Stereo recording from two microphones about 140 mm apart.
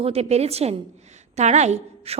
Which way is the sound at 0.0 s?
45° right (ahead or behind).